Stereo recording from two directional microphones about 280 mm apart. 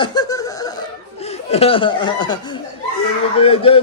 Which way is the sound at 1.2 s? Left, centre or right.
Left.